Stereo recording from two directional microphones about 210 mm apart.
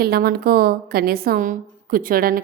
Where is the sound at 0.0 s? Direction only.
50° right (ahead or behind).